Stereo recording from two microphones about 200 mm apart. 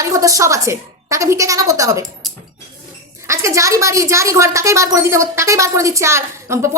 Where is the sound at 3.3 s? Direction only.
15° right (ahead or behind).